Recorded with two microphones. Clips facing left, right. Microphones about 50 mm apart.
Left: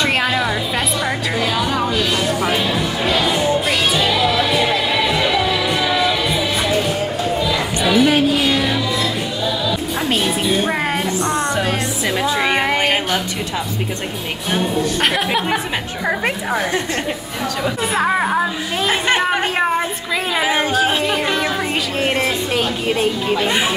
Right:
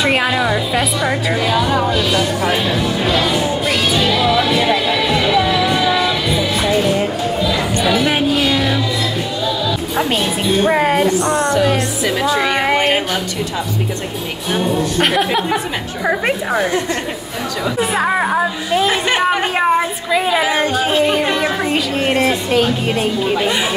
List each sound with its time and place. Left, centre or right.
0.0 s a woman's voice: centre
3.6 s music: centre
8.5 s music: centre
10.6 s a woman's voice: centre
11.3 s music: left
12.2 s a woman's voice: centre
15.0 s a woman's voice: centre
17.9 s a woman's voice: centre
20.4 s speech: centre
20.7 s a woman's voice: centre